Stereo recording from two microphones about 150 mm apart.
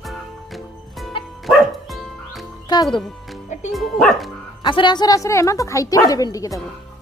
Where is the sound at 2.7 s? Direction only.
25° left (ahead or behind).